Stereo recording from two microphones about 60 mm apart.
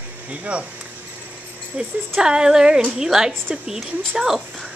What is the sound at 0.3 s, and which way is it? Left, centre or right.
Speech, right.